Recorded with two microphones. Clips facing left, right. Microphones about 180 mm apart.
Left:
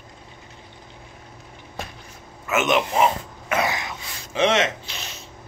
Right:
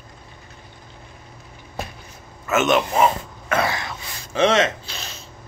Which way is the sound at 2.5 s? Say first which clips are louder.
Right 2 dB; 15° left (ahead or behind).